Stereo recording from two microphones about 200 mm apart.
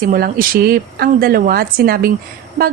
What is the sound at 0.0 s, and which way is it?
A woman's voice, 45° right (ahead or behind).